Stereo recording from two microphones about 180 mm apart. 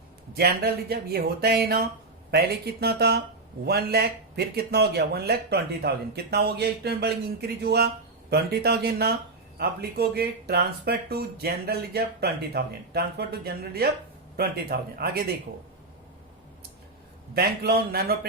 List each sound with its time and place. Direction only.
0.3 s speech: 60° right (ahead or behind)
17.3 s speech: 60° right (ahead or behind)